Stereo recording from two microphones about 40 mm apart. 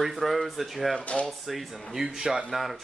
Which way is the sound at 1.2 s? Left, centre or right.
Centre.